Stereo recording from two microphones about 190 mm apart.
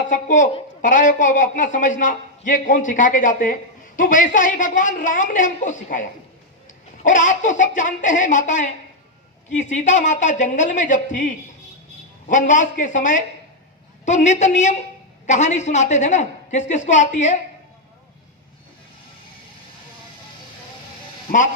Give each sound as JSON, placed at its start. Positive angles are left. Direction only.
{"t": 0.1, "sound": "a woman's voice", "side_deg": 40}
{"t": 12.3, "sound": "a woman's voice", "side_deg": 40}
{"t": 21.3, "sound": "a man's voice", "side_deg": 50}